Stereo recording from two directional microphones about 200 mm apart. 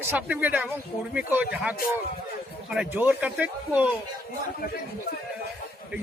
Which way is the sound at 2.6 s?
5° right (ahead or behind).